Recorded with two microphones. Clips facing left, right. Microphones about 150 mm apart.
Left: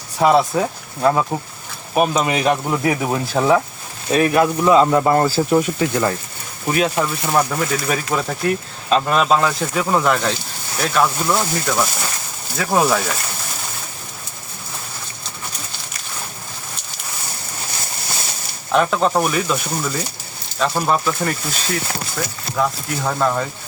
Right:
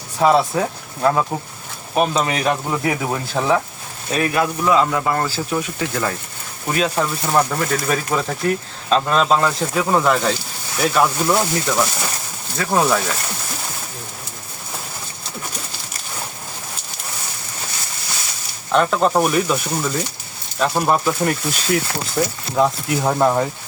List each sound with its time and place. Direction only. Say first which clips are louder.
0.2 s speech: left 1 dB; 5° left (ahead or behind)
2.8 s speech: left 2 dB; 15° left (ahead or behind)
4.1 s speech: left 4 dB; 25° left (ahead or behind); by 13.1 s centre (ahead or behind)
18.7 s speech: even; centre (ahead or behind)
22.2 s speech: right 4 dB; 25° right (ahead or behind)